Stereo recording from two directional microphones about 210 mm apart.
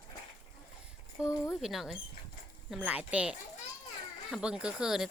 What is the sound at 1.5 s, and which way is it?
Speech, centre (ahead or behind).